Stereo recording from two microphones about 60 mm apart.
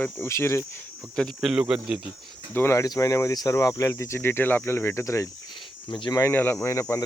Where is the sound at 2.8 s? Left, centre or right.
Left.